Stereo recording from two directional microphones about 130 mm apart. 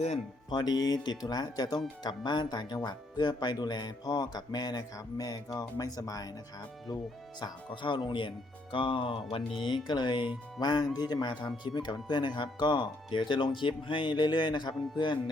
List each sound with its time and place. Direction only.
0.5 s speech: 30° left (ahead or behind)
7.3 s speech: 35° left (ahead or behind)